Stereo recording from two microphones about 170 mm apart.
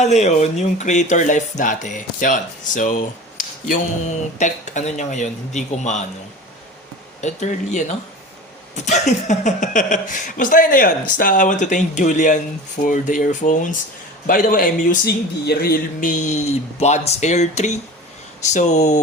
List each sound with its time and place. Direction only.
0.0 s speech: 40° left (ahead or behind)
7.2 s speech: 45° left (ahead or behind)